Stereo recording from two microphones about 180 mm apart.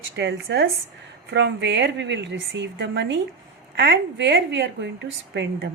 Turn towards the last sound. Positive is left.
turn(degrees=-70)  # may be behind; listen again after turning